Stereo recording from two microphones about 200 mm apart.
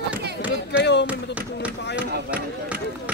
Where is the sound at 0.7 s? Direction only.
60° left (ahead or behind).